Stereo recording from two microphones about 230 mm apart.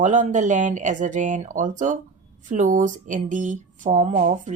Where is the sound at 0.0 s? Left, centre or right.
Right.